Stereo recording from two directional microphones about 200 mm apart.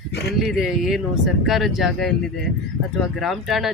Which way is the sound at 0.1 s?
55° left (ahead or behind).